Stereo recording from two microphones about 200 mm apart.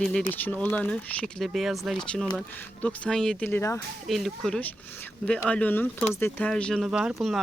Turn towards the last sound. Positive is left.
turn(degrees=0)  # may be behind; listen again after turning